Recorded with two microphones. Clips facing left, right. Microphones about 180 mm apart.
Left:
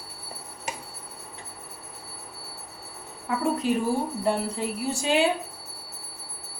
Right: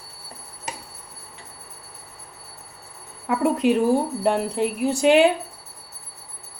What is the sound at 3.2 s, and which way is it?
Speech, 70° right (ahead or behind).